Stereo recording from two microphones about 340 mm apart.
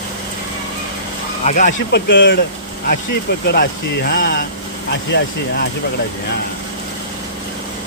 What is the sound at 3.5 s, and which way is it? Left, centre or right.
Speech, left.